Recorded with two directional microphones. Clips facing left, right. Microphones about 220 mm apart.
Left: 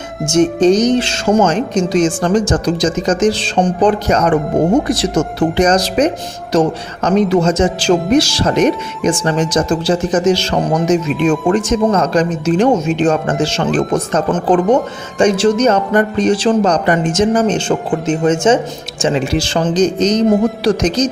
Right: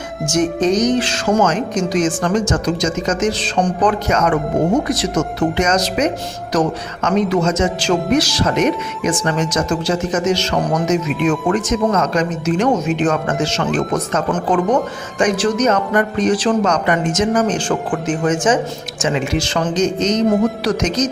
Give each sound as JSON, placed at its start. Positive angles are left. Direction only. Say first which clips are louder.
{"t": 0.3, "sound": "a man's voice", "louder": "left 5 dB", "side_deg": 30}